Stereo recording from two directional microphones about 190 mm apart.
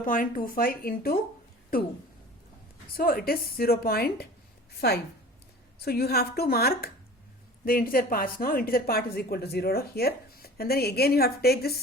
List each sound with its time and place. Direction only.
0.0 s a woman's voice: 45° left (ahead or behind)
2.9 s a woman's voice: 50° left (ahead or behind)
5.8 s a woman's voice: 55° left (ahead or behind)